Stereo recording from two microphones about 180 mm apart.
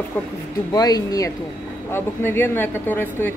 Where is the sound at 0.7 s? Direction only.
20° left (ahead or behind).